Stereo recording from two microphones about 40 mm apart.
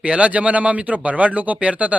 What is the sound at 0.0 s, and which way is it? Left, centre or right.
Speech, right.